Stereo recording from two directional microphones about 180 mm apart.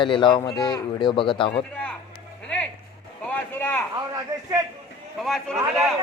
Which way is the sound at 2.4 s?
5° left (ahead or behind).